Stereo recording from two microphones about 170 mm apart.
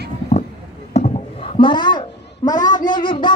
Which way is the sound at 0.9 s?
35° left (ahead or behind).